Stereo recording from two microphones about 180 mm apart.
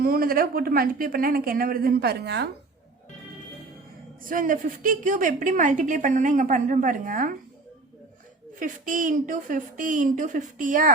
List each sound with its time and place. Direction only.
0.0 s speech: 55° right (ahead or behind)
4.2 s a woman's voice: 50° right (ahead or behind)
8.5 s a woman's voice: 45° right (ahead or behind)